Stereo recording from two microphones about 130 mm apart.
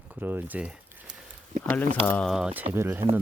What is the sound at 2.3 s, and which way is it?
Speech, 5° right (ahead or behind).